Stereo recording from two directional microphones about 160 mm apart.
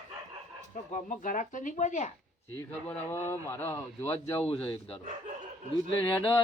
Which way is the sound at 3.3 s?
15° left (ahead or behind).